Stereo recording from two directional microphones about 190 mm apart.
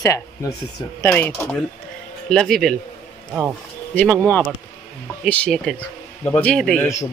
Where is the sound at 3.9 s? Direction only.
5° left (ahead or behind).